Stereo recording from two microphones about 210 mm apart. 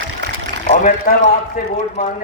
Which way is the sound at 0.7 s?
40° left (ahead or behind).